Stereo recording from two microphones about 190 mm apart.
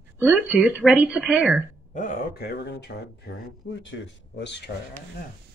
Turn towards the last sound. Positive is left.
turn(degrees=65)  # may be behind; listen again after turning